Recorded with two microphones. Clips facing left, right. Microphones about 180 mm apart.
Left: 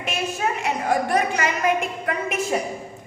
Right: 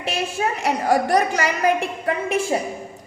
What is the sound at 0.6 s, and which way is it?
A woman's voice, 40° right (ahead or behind).